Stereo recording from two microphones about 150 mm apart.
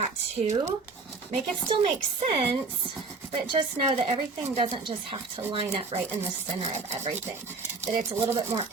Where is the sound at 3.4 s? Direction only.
30° right (ahead or behind); by 7.2 s 50° right (ahead or behind).